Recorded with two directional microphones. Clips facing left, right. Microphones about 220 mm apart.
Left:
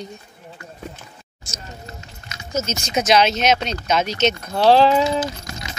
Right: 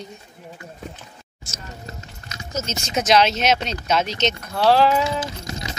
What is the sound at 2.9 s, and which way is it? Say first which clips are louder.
Speech: left 1 dB; centre (ahead or behind).